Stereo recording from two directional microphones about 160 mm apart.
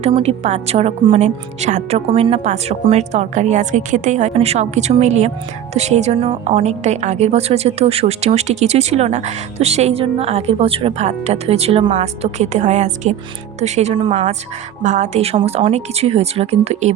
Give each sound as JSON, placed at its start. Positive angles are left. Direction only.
{"t": 0.0, "sound": "a woman's voice", "side_deg": -40}